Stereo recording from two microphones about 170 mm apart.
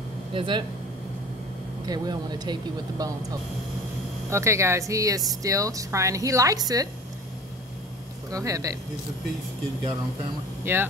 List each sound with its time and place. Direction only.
0.3 s speech: 30° right (ahead or behind)
1.9 s speech: 25° right (ahead or behind)
8.3 s speech: 20° right (ahead or behind)
10.6 s speech: 10° right (ahead or behind)